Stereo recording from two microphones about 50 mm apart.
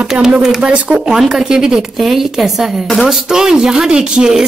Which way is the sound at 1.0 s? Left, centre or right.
Centre.